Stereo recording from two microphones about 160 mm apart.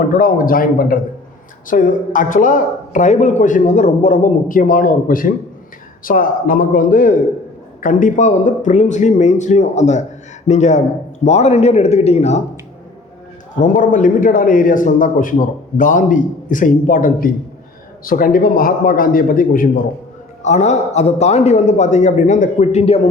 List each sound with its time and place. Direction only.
0.1 s a man's voice: 60° left (ahead or behind); by 12.4 s 45° left (ahead or behind)
13.6 s a man's voice: 55° left (ahead or behind)
20.4 s a man's voice: 45° left (ahead or behind)